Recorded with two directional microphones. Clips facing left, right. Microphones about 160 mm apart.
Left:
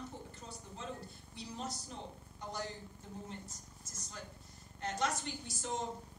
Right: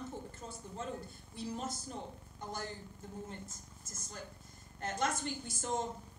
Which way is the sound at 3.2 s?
50° right (ahead or behind).